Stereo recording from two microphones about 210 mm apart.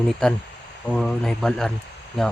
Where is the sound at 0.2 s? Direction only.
5° left (ahead or behind).